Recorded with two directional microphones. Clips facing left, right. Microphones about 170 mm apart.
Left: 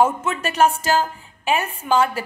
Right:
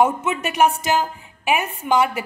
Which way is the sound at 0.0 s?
20° right (ahead or behind).